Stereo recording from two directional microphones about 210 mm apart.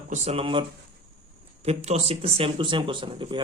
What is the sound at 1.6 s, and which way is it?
Speech, 30° right (ahead or behind).